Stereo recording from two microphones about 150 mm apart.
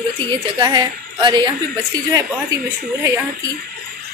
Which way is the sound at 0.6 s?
30° right (ahead or behind).